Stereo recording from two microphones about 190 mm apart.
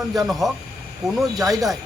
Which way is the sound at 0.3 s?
Centre (ahead or behind).